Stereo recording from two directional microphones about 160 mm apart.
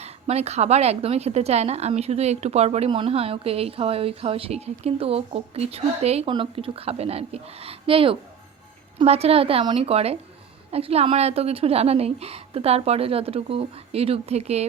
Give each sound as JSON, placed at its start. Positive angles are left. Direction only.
{"t": 0.0, "sound": "a woman's voice", "side_deg": -40}